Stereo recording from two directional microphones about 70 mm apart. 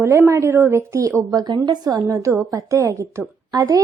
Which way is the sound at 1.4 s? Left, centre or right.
Right.